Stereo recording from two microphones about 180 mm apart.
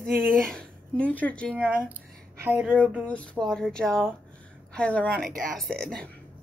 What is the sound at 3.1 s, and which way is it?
A woman's voice, 5° left (ahead or behind).